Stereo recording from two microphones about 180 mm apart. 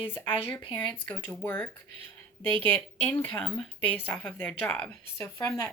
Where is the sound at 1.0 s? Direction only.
10° left (ahead or behind).